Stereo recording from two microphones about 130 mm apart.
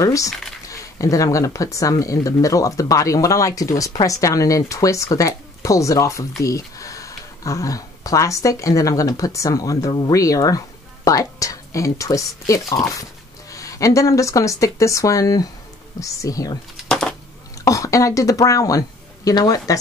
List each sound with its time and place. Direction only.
0.0 s speech: 25° left (ahead or behind)
16.8 s a sound: 5° left (ahead or behind)
17.6 s a woman's voice: 25° left (ahead or behind)